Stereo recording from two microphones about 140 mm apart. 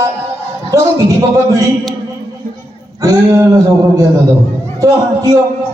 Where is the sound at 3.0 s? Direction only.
20° right (ahead or behind).